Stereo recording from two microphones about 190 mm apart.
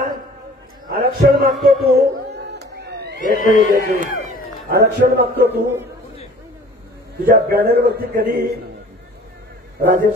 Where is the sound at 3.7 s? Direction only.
45° right (ahead or behind).